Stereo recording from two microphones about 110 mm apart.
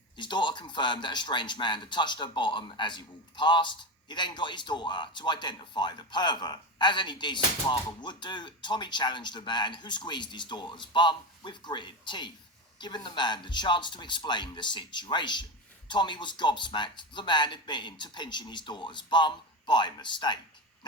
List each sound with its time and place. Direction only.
0.2 s speech: 45° left (ahead or behind)